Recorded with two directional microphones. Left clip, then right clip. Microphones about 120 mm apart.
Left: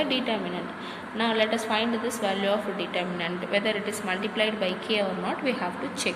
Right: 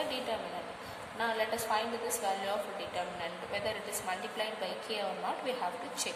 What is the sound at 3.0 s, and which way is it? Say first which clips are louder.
A woman's voice: left 6 dB; 25° left (ahead or behind).